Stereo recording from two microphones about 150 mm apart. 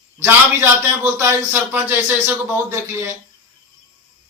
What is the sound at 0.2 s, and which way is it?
Speech, 15° right (ahead or behind).